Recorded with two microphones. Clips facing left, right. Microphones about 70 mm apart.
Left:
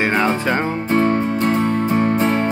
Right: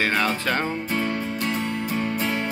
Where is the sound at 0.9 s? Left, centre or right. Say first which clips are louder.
Left 12 dB; left.